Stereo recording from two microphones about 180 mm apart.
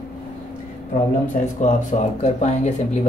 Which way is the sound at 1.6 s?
40° left (ahead or behind).